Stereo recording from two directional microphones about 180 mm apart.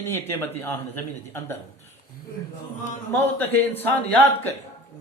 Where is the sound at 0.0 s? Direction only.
15° left (ahead or behind).